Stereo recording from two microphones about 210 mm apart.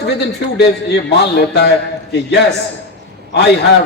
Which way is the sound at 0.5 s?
50° left (ahead or behind).